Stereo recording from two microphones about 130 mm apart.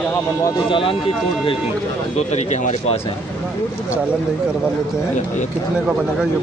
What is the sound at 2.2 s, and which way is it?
Speech, 60° left (ahead or behind).